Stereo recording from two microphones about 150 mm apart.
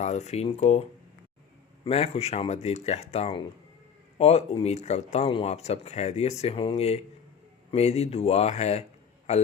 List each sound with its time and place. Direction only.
0.0 s speech: 50° left (ahead or behind)